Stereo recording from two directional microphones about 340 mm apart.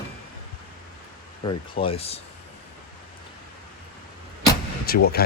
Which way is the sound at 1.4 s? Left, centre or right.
Centre.